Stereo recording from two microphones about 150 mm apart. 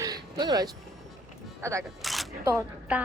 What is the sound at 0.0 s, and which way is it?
Music, 25° right (ahead or behind).